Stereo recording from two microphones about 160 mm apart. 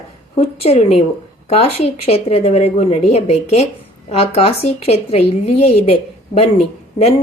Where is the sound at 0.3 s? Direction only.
40° left (ahead or behind).